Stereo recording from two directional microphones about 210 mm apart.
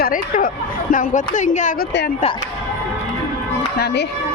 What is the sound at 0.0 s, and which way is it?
Speech, 40° left (ahead or behind).